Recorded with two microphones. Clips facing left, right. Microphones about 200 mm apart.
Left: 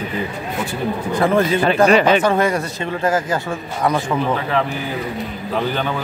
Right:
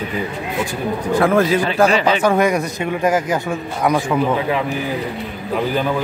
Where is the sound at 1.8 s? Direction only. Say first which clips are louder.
Left 4 dB; 55° left (ahead or behind).